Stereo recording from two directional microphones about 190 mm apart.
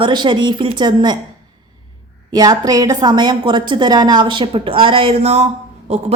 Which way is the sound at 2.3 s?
20° right (ahead or behind).